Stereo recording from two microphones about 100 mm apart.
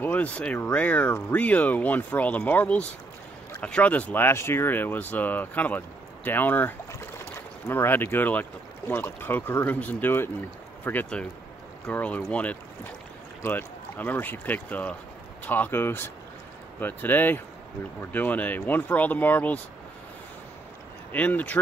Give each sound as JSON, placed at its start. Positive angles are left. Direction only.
{"t": 0.0, "sound": "speech", "side_deg": 15}
{"t": 21.1, "sound": "speech", "side_deg": 15}